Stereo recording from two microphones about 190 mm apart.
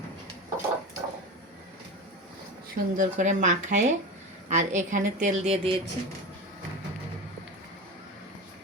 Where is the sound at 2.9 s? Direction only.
40° right (ahead or behind).